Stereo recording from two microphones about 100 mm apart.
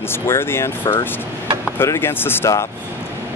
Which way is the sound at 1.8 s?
25° left (ahead or behind).